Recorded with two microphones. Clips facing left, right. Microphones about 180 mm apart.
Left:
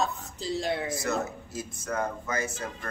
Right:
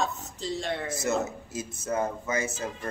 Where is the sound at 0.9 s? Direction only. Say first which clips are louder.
Right 2 dB; 20° right (ahead or behind).